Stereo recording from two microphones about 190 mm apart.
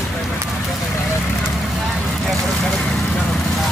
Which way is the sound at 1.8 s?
Centre (ahead or behind).